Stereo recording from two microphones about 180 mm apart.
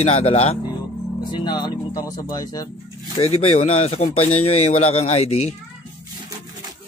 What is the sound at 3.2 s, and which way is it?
A man's voice, 35° left (ahead or behind).